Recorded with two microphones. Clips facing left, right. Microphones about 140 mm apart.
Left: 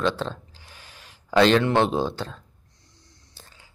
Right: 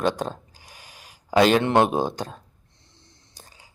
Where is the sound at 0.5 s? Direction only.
10° right (ahead or behind).